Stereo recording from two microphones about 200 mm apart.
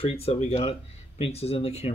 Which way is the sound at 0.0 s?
30° left (ahead or behind).